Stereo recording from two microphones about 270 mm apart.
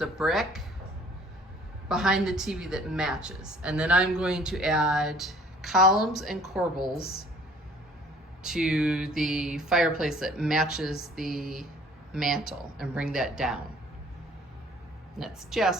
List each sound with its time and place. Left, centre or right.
0.0 s a woman's voice: centre
1.9 s a woman's voice: centre
6.9 s a woman's voice: left
8.4 s a woman's voice: centre
15.2 s a woman's voice: centre